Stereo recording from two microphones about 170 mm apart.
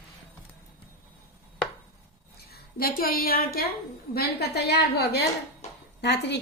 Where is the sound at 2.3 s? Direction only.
65° left (ahead or behind).